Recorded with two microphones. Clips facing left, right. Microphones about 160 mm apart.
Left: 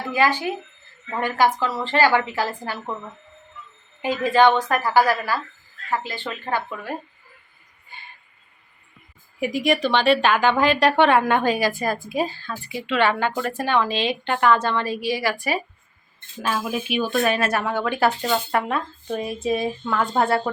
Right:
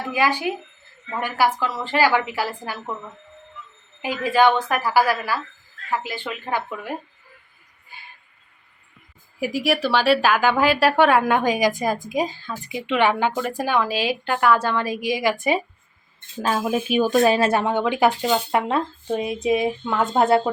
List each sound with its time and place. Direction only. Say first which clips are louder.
0.1 s a woman's voice: left 1 dB; 10° right (ahead or behind)
4.0 s a woman's voice: left 1 dB; 10° right (ahead or behind)
9.4 s a woman's voice: left 1 dB; 5° right (ahead or behind); by 15.6 s 20° right (ahead or behind)
16.4 s speech: right 3 dB; 45° right (ahead or behind)
17.2 s speech: right 4 dB; 30° right (ahead or behind); by 18.6 s 10° right (ahead or behind)
18.7 s speech: right 3 dB; 20° right (ahead or behind)